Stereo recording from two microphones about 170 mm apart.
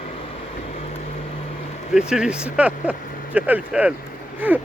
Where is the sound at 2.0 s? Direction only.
5° right (ahead or behind).